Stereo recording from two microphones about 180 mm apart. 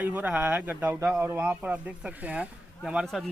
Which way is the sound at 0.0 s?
10° right (ahead or behind).